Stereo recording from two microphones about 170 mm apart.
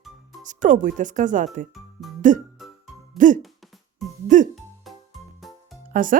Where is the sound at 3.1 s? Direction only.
50° right (ahead or behind).